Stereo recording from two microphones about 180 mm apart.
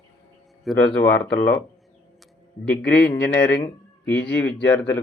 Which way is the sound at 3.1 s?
10° left (ahead or behind).